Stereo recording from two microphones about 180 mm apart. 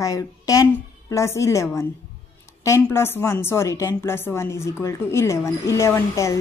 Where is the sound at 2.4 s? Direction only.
15° left (ahead or behind).